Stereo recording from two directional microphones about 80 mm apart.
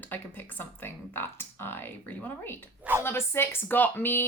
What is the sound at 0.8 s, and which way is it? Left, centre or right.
Speech, left.